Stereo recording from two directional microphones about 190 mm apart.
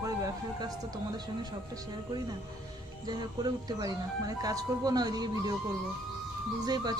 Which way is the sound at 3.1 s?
20° right (ahead or behind).